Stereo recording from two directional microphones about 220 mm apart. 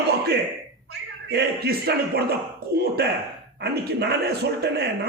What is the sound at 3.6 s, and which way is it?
A man's voice, 45° right (ahead or behind).